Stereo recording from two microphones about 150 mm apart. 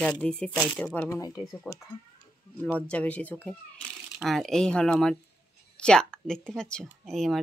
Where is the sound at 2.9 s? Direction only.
10° left (ahead or behind).